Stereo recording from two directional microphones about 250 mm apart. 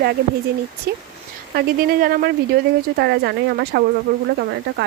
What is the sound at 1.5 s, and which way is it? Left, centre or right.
Speech, right.